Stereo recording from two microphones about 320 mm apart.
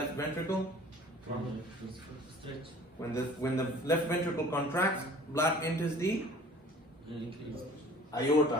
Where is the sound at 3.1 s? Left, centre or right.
Centre.